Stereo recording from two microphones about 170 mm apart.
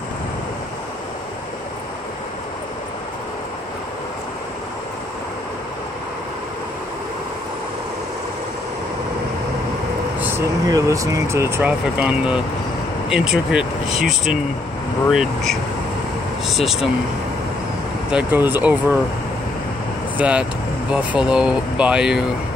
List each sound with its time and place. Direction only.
10.2 s speech: 15° right (ahead or behind)
18.1 s speech: 10° right (ahead or behind)
20.2 s speech: 5° right (ahead or behind)